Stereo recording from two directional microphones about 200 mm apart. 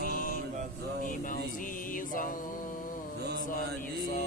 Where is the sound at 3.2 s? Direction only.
55° right (ahead or behind).